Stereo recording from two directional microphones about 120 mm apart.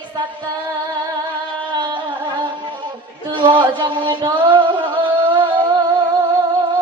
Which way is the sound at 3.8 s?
40° right (ahead or behind).